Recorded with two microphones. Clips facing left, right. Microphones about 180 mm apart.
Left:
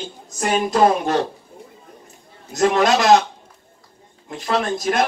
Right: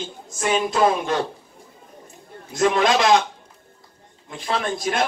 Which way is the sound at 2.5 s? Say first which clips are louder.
Left 2 dB; 45° left (ahead or behind).